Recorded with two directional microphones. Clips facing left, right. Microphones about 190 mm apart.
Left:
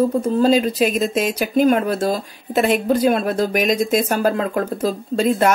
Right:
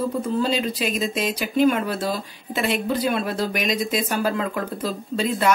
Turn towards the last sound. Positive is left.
turn(degrees=45)  # may be behind; listen again after turning